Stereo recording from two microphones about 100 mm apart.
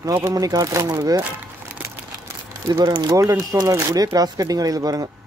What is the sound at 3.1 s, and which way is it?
Speech, 35° right (ahead or behind).